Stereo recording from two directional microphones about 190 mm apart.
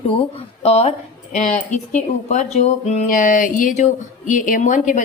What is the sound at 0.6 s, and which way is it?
Speech, 30° left (ahead or behind).